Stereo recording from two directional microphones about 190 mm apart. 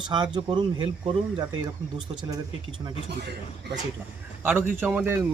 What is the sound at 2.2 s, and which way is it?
Speech, 25° right (ahead or behind).